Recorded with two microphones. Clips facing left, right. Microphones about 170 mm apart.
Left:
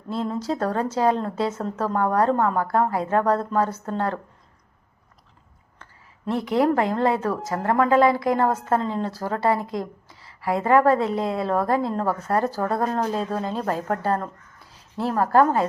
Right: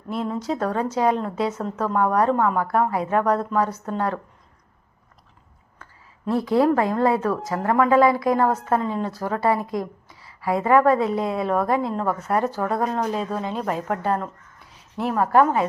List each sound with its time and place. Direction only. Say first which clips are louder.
0.1 s a woman's voice: even; 30° left (ahead or behind)
6.2 s a woman's voice: right 2 dB; 20° left (ahead or behind)